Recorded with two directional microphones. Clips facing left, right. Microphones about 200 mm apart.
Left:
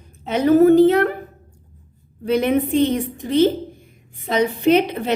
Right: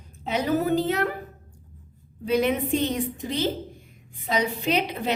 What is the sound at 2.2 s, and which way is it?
Speech, 55° left (ahead or behind).